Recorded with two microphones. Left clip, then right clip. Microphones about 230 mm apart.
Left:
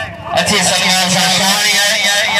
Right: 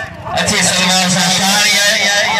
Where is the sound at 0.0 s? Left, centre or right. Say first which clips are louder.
Left 2 dB; left.